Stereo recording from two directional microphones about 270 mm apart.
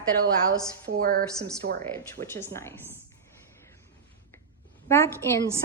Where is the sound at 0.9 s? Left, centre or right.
Right.